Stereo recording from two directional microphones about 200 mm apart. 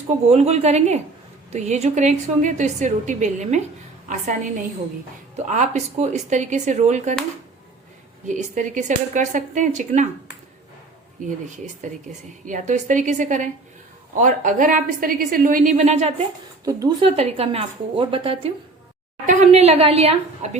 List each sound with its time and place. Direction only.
0.3 s a woman's voice: 35° right (ahead or behind)
5.5 s a woman's voice: 35° right (ahead or behind)
8.3 s a woman's voice: 40° right (ahead or behind)
11.4 s a woman's voice: 40° right (ahead or behind)
16.6 s speech: 15° right (ahead or behind)
17.2 s a woman's voice: 30° right (ahead or behind)
19.2 s a woman's voice: 40° right (ahead or behind)